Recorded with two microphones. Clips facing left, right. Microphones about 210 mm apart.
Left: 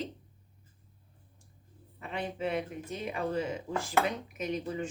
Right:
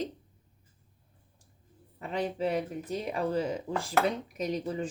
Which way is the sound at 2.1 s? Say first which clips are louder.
Right 3 dB; 35° right (ahead or behind).